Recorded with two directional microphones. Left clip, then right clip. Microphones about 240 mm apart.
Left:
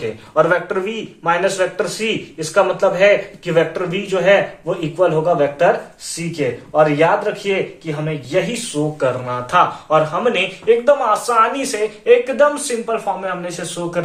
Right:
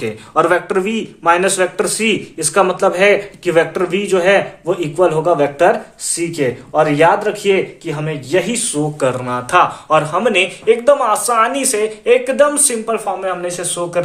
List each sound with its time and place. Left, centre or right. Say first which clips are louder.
0.3 s a man's voice: right 2 dB; right